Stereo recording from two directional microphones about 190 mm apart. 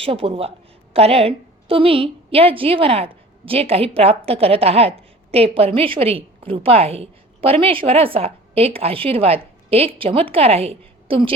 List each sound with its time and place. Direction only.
0.0 s a woman's voice: 30° right (ahead or behind)